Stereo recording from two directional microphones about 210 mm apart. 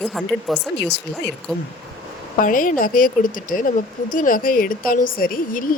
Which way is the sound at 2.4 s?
40° left (ahead or behind).